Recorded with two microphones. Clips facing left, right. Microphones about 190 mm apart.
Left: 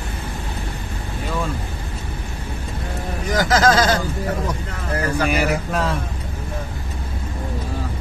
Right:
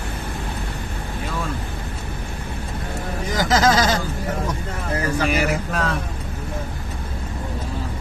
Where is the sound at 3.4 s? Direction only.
20° right (ahead or behind).